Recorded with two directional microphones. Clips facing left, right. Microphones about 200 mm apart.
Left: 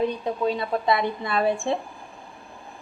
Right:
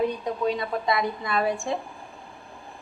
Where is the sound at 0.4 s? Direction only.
30° left (ahead or behind).